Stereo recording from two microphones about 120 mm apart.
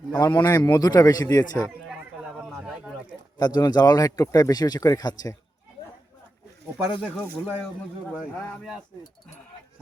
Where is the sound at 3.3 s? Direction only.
35° left (ahead or behind).